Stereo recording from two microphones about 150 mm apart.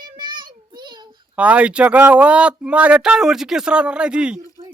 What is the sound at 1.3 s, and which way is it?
Speech, 10° right (ahead or behind).